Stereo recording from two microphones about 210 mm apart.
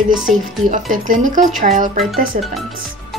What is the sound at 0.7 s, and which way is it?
Speech, 40° right (ahead or behind).